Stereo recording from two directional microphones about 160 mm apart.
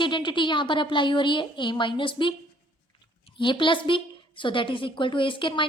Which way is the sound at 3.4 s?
30° left (ahead or behind).